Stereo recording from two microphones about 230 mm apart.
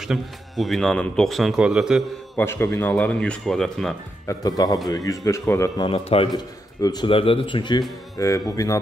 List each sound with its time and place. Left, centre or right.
0.0 s a man's voice: centre
2.4 s a man's voice: centre
4.3 s speech: centre
5.9 s a man's voice: left